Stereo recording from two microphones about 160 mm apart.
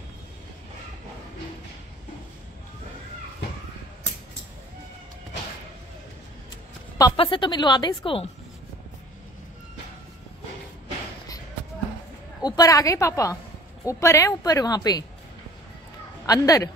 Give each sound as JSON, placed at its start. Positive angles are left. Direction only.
{"t": 7.2, "sound": "a woman's voice", "side_deg": 30}
{"t": 12.4, "sound": "a woman's voice", "side_deg": 25}
{"t": 16.3, "sound": "a woman's voice", "side_deg": 20}